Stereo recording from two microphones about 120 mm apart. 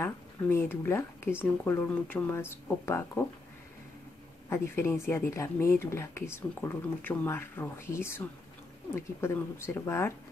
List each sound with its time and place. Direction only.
0.0 s speech: 20° left (ahead or behind)
4.5 s speech: 20° left (ahead or behind)